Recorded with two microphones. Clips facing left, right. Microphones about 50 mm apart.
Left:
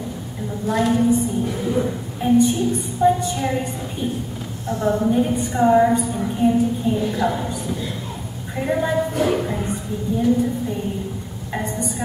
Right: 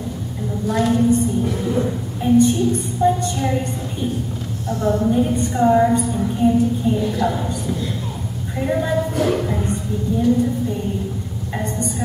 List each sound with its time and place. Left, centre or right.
0.7 s a sound: centre
4.6 s a woman's voice: centre
11.5 s music: centre